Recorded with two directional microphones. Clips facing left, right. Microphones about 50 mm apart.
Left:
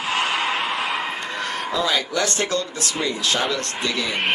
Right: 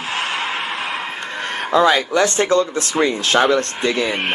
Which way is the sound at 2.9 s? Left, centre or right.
Right.